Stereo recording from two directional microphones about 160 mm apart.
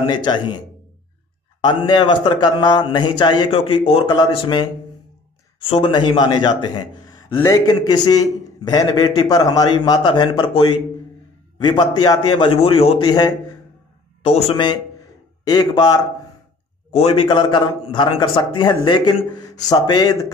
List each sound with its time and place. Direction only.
0.0 s a man's voice: 25° left (ahead or behind)
14.2 s a man's voice: 35° left (ahead or behind)
16.9 s a man's voice: 35° left (ahead or behind)